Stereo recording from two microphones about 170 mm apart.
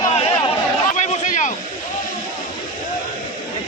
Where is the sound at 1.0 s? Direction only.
45° left (ahead or behind).